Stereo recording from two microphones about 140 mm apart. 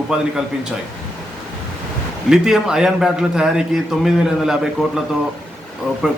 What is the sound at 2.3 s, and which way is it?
A man's voice, 5° right (ahead or behind).